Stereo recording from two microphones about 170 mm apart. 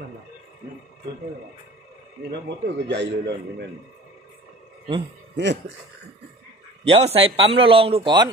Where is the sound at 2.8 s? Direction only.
90° right.